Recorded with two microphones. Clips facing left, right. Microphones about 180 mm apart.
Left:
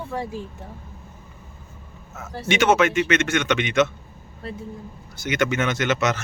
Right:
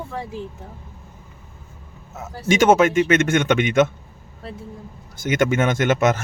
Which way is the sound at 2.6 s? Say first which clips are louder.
Right 4 dB; 45° right (ahead or behind).